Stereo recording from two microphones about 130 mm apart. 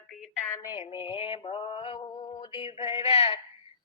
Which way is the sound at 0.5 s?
30° left (ahead or behind).